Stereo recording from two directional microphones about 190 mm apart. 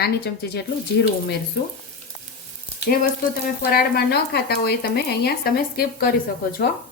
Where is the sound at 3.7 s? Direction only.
55° left (ahead or behind).